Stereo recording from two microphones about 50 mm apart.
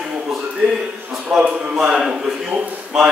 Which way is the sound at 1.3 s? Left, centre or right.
Centre.